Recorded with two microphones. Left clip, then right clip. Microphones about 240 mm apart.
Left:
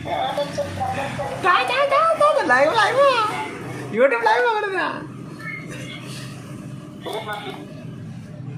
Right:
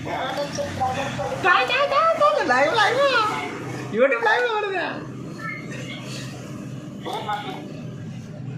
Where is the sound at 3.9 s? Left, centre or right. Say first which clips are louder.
Left 2 dB; left.